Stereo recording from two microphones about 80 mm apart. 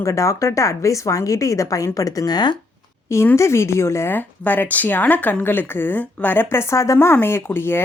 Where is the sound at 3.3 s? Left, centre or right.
Left.